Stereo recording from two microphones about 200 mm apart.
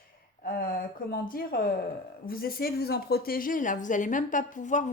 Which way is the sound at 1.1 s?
50° left (ahead or behind).